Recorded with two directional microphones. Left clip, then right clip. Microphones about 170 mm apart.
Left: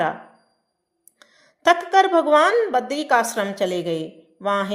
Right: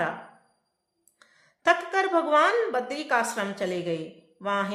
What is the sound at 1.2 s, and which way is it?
A woman's voice, 30° left (ahead or behind).